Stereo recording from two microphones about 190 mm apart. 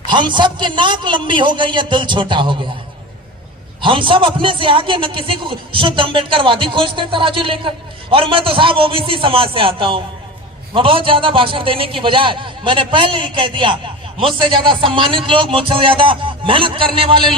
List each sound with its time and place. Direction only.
0.1 s a man's voice: 25° right (ahead or behind)
3.8 s a man's voice: 25° right (ahead or behind)